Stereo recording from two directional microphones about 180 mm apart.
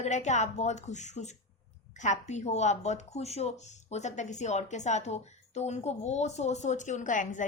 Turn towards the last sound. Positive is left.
turn(degrees=45)  # may be behind; listen again after turning